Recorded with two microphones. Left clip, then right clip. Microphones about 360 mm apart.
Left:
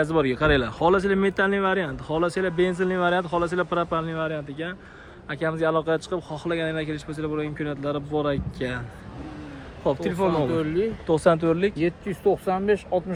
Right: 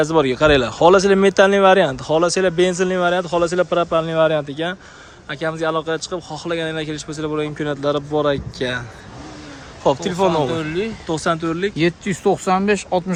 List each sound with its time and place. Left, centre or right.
0.0 s speech: centre
9.8 s speech: centre
10.6 s speech: right
11.0 s speech: centre
11.8 s speech: right